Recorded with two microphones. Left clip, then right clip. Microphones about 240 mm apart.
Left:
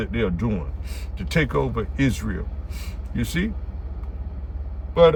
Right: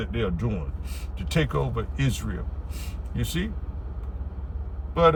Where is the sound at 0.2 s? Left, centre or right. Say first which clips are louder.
Left 4 dB; centre.